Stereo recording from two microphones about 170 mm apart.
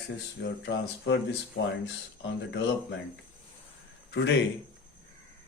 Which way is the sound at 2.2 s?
90° left.